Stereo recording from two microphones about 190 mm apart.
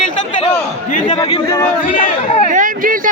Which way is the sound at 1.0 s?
25° left (ahead or behind).